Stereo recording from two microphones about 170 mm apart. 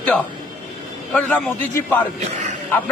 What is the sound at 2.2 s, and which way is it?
Speech, 45° right (ahead or behind).